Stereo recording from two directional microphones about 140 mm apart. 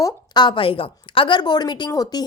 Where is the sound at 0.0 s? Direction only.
30° left (ahead or behind).